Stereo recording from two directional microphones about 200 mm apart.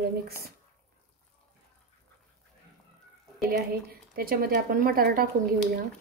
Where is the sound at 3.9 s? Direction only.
50° right (ahead or behind).